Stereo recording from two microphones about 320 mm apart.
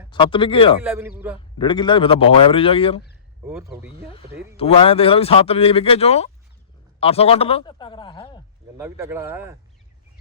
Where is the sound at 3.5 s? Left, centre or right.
Centre.